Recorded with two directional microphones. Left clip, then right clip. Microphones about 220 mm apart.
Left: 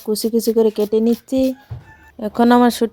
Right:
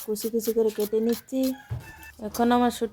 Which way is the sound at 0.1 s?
40° left (ahead or behind).